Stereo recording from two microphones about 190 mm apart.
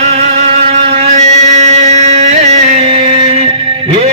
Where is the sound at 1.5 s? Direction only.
35° right (ahead or behind).